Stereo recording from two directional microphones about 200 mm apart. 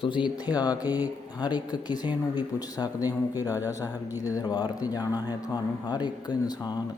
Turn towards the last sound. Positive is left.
turn(degrees=20)  # may be behind; listen again after turning